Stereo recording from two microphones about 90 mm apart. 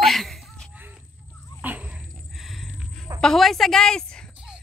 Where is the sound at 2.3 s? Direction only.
Centre (ahead or behind).